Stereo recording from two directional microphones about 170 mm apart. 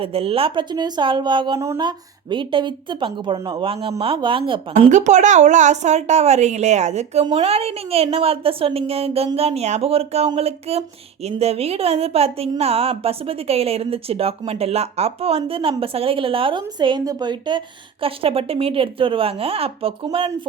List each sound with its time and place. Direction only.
0.0 s a woman's voice: 35° right (ahead or behind)
4.8 s a woman's voice: 45° right (ahead or behind)